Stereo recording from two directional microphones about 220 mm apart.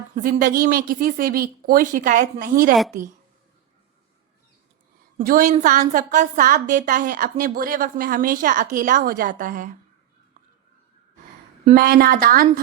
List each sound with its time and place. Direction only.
0.2 s a woman's voice: 35° right (ahead or behind)
5.1 s a woman's voice: 40° right (ahead or behind)
11.6 s a woman's voice: 40° right (ahead or behind)